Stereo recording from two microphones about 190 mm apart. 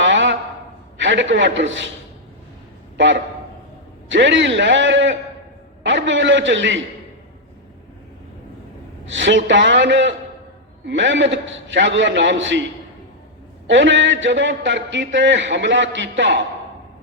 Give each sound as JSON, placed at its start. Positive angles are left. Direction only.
{"t": 0.0, "sound": "a sound", "side_deg": -70}
{"t": 0.9, "sound": "a man's voice", "side_deg": -75}
{"t": 4.1, "sound": "a man's voice", "side_deg": -75}
{"t": 9.0, "sound": "a man's voice", "side_deg": -75}
{"t": 13.7, "sound": "a man's voice", "side_deg": -70}